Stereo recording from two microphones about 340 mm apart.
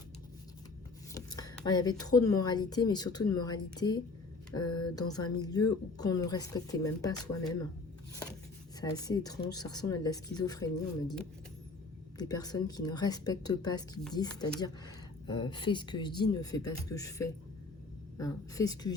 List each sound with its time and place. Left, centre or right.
1.1 s a sound: centre
2.4 s speech: centre
8.8 s speech: centre
12.1 s speech: centre